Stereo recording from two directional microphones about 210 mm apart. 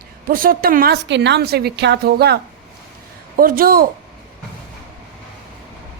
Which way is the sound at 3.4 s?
45° right (ahead or behind).